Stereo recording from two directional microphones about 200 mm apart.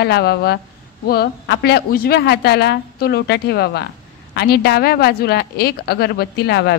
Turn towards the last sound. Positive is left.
turn(degrees=55)  # may be behind; listen again after turning